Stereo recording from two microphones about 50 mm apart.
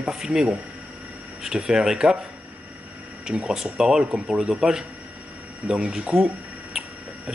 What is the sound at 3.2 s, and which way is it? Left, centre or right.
Speech, centre.